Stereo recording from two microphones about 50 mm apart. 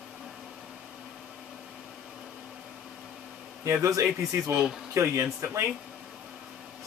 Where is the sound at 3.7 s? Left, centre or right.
Right.